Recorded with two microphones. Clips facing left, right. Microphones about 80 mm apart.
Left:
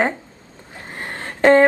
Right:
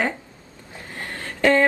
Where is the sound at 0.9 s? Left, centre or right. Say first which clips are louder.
Left 3 dB; left.